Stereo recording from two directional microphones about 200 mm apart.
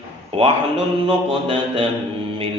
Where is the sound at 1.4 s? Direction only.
25° right (ahead or behind).